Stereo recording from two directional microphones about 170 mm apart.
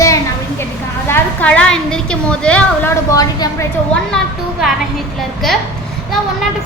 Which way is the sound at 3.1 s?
20° left (ahead or behind).